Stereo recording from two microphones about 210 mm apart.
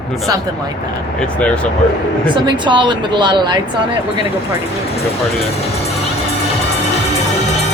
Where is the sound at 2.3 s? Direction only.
20° right (ahead or behind).